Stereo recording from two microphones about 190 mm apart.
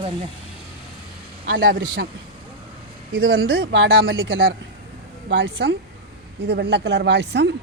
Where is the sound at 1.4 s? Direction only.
75° right (ahead or behind).